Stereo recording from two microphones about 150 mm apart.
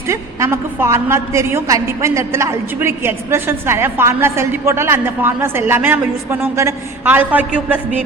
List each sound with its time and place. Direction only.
0.1 s a woman's voice: 20° right (ahead or behind)